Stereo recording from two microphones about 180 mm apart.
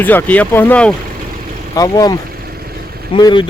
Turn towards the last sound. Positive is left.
turn(degrees=25)  # may be behind; listen again after turning